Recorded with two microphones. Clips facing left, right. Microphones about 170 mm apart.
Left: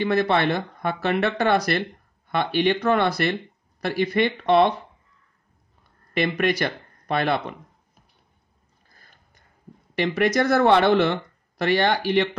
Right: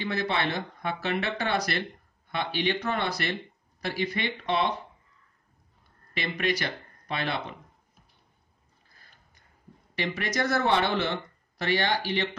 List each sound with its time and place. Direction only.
0.0 s speech: 55° left (ahead or behind)
6.1 s speech: 55° left (ahead or behind)
9.9 s speech: 60° left (ahead or behind)